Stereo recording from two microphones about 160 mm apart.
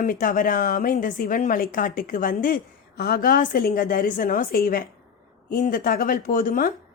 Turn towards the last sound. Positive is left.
turn(degrees=60)  # may be behind; listen again after turning